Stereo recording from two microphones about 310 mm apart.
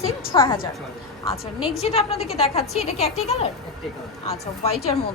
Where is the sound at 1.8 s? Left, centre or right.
Centre.